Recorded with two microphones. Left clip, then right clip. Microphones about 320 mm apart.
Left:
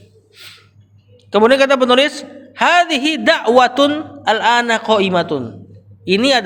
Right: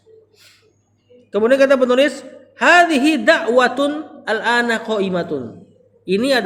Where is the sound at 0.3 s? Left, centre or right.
Left.